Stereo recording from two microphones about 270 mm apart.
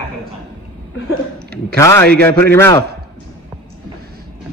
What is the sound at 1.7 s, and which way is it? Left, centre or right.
A man's voice, centre.